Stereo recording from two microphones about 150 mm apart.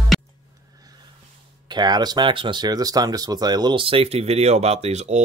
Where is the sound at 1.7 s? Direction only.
30° right (ahead or behind).